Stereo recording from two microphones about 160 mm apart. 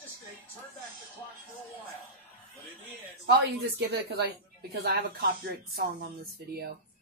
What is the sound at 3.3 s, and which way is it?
Speech, 90° right.